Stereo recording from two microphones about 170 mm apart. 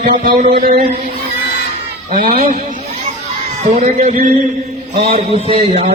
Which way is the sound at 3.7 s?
45° right (ahead or behind).